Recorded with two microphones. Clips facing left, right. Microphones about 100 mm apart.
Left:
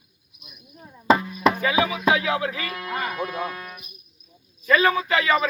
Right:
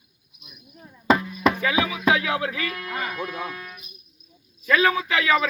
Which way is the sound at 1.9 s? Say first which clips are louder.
Left 1 dB; centre (ahead or behind).